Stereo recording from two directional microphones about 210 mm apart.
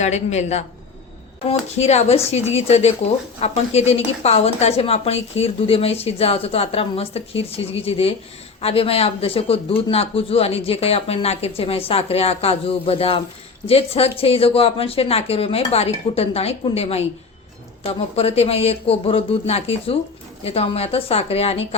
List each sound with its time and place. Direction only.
0.0 s a woman's voice: 35° left (ahead or behind)
1.8 s a woman's voice: 30° left (ahead or behind)